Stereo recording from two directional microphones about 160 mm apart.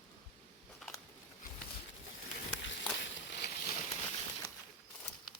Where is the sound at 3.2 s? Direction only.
90° left.